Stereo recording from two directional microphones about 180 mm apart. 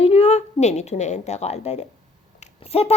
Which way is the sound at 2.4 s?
35° left (ahead or behind).